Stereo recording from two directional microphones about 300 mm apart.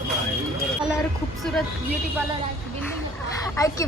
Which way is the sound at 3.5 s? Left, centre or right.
Centre.